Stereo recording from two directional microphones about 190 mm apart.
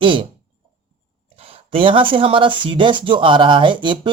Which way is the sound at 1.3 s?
30° right (ahead or behind).